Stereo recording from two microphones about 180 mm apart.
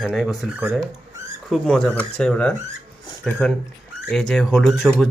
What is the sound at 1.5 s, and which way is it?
Speech, centre (ahead or behind).